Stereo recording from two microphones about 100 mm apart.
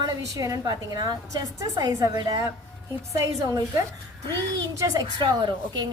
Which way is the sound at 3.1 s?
30° right (ahead or behind).